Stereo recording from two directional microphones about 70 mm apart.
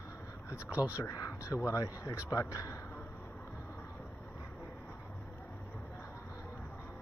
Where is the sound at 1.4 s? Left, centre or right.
Left.